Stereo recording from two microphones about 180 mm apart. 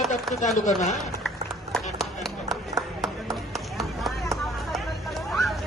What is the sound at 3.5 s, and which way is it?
Run, centre (ahead or behind).